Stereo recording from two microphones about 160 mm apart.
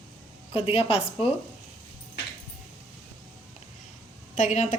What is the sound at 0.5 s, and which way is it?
Speech, 35° left (ahead or behind).